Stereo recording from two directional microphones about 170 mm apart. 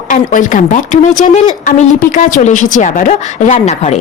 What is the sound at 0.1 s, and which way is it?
Speech, 50° left (ahead or behind).